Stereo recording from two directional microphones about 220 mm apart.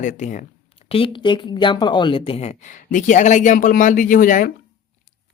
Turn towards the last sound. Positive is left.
turn(degrees=35)  # may be behind; listen again after turning